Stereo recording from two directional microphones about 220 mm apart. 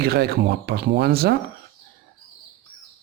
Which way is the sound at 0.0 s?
45° right (ahead or behind).